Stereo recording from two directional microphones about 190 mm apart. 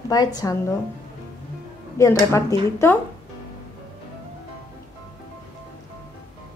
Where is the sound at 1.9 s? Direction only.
15° left (ahead or behind).